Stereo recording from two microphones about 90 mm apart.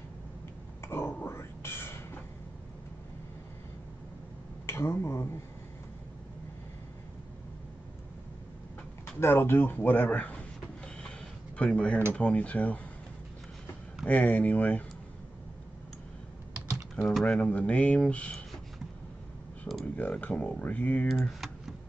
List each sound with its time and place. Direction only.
0.8 s whispering: 25° left (ahead or behind)
4.6 s speech: 30° left (ahead or behind)
9.2 s speech: 25° left (ahead or behind)
11.0 s a sound: 10° left (ahead or behind)
12.1 s speech: 15° left (ahead or behind)
14.0 s speech: 15° left (ahead or behind)
16.9 s speech: 5° left (ahead or behind)
19.8 s speech: 15° left (ahead or behind)
21.1 s typing: centre (ahead or behind)